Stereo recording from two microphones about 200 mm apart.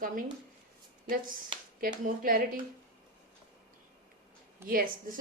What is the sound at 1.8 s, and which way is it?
Speech, 45° right (ahead or behind).